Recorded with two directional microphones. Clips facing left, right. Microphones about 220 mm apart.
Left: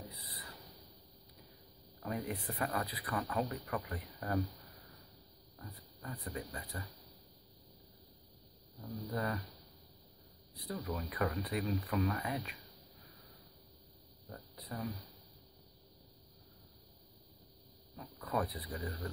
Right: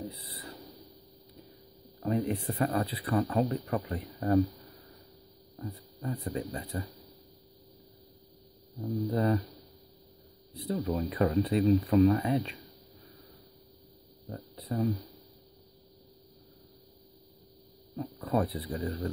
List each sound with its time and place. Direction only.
0.1 s a sound: 25° right (ahead or behind)
2.0 s speech: 25° right (ahead or behind)
5.6 s speech: 25° right (ahead or behind)
9.1 s speech: 25° right (ahead or behind)
10.5 s speech: 25° right (ahead or behind)
14.3 s speech: 30° right (ahead or behind)
17.9 s speech: 30° right (ahead or behind)